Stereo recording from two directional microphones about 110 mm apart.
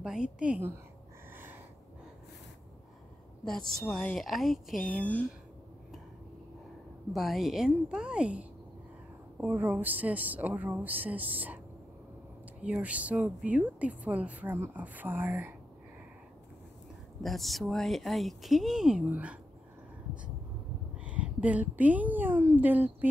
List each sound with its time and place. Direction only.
0.0 s a woman's voice: 5° right (ahead or behind)
1.3 s snort: 20° right (ahead or behind)
3.4 s speech: 5° left (ahead or behind)
7.1 s a woman's voice: centre (ahead or behind)
12.6 s a woman's voice: 10° right (ahead or behind)
17.2 s speech: centre (ahead or behind)
19.0 s a woman's voice: 15° right (ahead or behind)
21.0 s a woman's voice: 10° right (ahead or behind)